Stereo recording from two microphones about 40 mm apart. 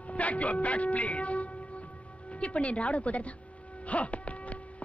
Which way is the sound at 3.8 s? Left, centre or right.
Left.